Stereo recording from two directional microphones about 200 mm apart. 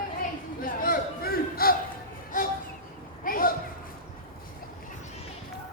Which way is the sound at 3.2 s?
45° left (ahead or behind).